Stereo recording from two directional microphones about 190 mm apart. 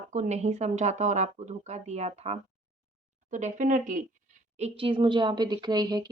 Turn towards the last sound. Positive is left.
turn(degrees=-20)  # may be behind; listen again after turning